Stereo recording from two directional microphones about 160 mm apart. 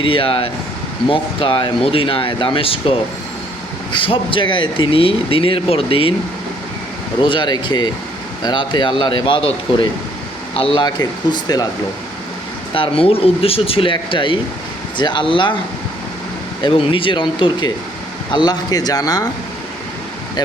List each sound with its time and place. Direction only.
0.0 s speech: 35° left (ahead or behind)
3.9 s speech: 35° left (ahead or behind)
7.2 s speech: 30° left (ahead or behind)
12.7 s speech: 35° left (ahead or behind)
16.6 s speech: 35° left (ahead or behind)